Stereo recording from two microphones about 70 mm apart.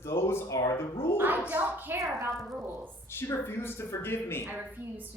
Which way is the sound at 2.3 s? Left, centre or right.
Centre.